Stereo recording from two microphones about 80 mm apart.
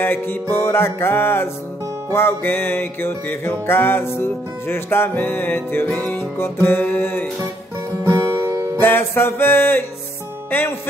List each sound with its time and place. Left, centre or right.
0.0 s music: left
8.0 s music: right
8.7 s music: left